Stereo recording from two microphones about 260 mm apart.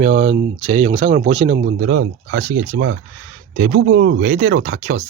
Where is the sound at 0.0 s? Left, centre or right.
Right.